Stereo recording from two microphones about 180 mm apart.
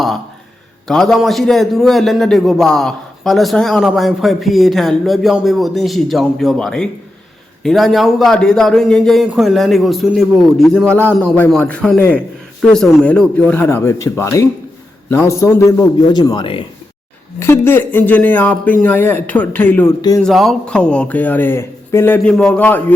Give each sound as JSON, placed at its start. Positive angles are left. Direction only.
{"t": 0.9, "sound": "a man's voice", "side_deg": 0}
{"t": 17.4, "sound": "a man's voice", "side_deg": 10}
{"t": 20.2, "sound": "a man's voice", "side_deg": 0}